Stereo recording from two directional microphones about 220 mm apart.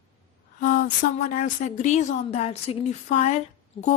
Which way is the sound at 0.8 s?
40° left (ahead or behind).